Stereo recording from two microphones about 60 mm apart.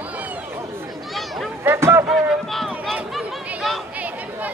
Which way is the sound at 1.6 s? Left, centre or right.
Right.